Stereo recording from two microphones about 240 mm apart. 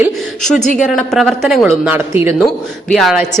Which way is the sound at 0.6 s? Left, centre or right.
Left.